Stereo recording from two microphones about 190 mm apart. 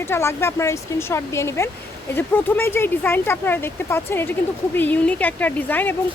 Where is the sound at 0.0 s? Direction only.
15° left (ahead or behind).